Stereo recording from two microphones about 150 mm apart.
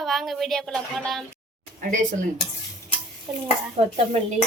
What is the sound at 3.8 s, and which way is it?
Dishes, 40° right (ahead or behind).